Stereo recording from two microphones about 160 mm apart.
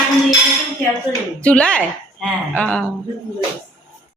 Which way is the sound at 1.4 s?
5° left (ahead or behind).